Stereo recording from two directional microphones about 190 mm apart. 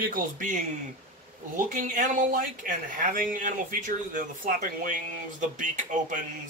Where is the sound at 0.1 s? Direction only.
45° right (ahead or behind).